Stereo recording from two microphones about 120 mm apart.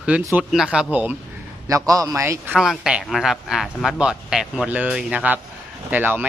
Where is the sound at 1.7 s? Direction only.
30° right (ahead or behind).